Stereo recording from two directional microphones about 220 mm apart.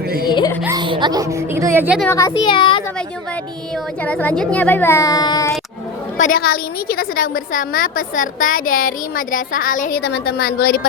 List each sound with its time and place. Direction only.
0.3 s a sound: 20° left (ahead or behind)
0.6 s speech: 15° right (ahead or behind)
2.0 s a child's voice: 15° left (ahead or behind)
4.0 s speech: 5° left (ahead or behind)
6.1 s a woman's voice: 40° left (ahead or behind)